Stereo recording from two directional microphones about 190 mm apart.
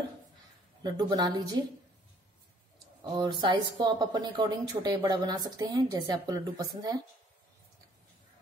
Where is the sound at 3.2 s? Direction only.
25° right (ahead or behind).